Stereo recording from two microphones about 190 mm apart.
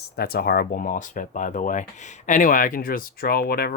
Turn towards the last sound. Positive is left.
turn(degrees=55)  # may be behind; listen again after turning